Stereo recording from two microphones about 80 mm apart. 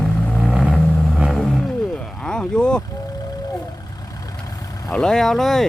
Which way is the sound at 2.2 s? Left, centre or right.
Centre.